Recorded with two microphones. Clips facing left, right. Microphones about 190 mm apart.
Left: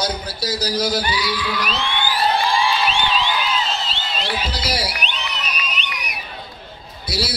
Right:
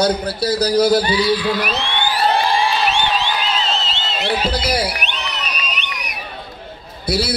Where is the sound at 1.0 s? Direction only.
30° right (ahead or behind).